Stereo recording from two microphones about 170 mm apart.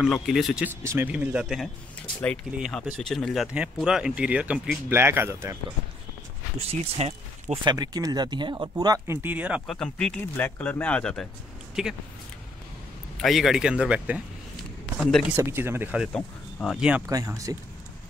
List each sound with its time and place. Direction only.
0.0 s speech: centre (ahead or behind)
0.7 s speech: 10° right (ahead or behind)
6.7 s speech: 40° right (ahead or behind)
7.6 s speech: 25° right (ahead or behind)
9.7 s speech: 5° left (ahead or behind)
13.2 s speech: centre (ahead or behind)
15.3 s speech: 15° right (ahead or behind)
16.1 s speech: 5° left (ahead or behind)
17.0 s speech: 20° right (ahead or behind)